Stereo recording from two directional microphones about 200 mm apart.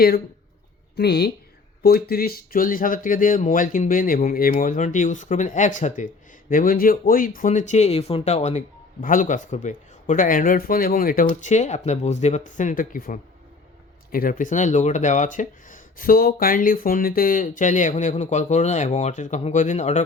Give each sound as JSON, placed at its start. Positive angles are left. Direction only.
{"t": 0.9, "sound": "a woman's voice", "side_deg": 55}